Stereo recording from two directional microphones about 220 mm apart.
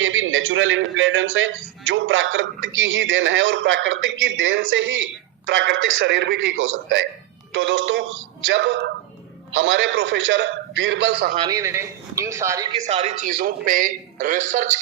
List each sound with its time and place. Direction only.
0.0 s a man's voice: 65° right (ahead or behind); by 11.3 s 45° right (ahead or behind)
11.3 s speech: 15° right (ahead or behind)
12.8 s a man's voice: 30° right (ahead or behind)